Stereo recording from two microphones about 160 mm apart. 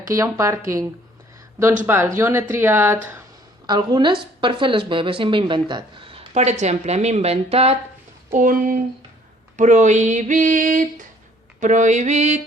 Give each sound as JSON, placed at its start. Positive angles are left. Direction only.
{"t": 0.1, "sound": "a woman's voice", "side_deg": -20}
{"t": 1.9, "sound": "speech", "side_deg": -15}
{"t": 3.7, "sound": "a woman's voice", "side_deg": -30}
{"t": 8.3, "sound": "a sound", "side_deg": -55}